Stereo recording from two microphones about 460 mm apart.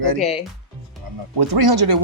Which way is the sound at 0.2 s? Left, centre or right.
Centre.